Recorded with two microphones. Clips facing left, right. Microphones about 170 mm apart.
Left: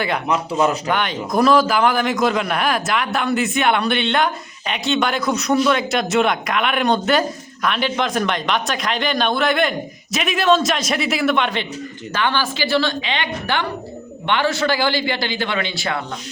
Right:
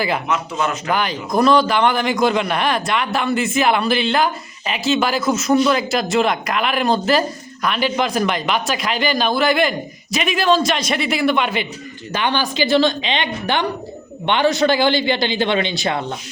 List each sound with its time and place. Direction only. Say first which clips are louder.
0.9 s a man's voice: right 1 dB; centre (ahead or behind)
12.1 s a man's voice: right 1 dB; 15° right (ahead or behind)